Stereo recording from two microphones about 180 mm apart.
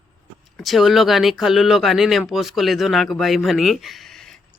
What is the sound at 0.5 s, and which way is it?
Speech, centre (ahead or behind).